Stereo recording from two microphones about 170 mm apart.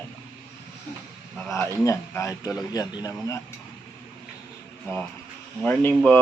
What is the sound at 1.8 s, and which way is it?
A man's voice, 20° left (ahead or behind).